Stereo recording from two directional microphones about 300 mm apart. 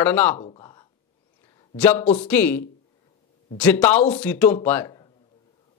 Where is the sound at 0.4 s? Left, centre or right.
Centre.